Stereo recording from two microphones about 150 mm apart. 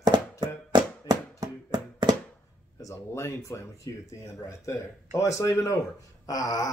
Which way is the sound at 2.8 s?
20° left (ahead or behind).